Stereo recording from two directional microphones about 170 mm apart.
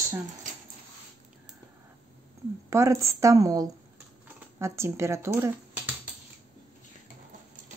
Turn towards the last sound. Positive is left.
turn(degrees=-15)  # may be behind; listen again after turning